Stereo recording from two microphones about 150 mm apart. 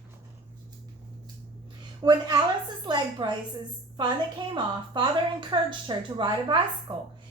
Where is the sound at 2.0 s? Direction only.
30° right (ahead or behind).